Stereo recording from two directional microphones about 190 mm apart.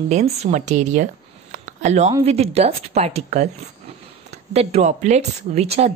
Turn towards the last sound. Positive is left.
turn(degrees=-35)  # may be behind; listen again after turning